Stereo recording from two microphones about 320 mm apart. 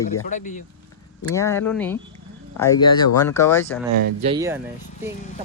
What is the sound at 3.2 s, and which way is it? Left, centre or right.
Speech, centre.